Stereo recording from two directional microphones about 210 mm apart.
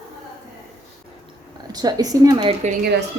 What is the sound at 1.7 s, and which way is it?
Speech, 20° right (ahead or behind).